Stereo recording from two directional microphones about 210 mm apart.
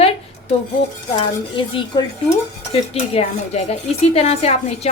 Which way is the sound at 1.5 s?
20° left (ahead or behind).